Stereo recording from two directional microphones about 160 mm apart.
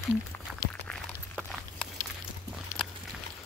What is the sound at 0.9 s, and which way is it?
Walk, 5° left (ahead or behind).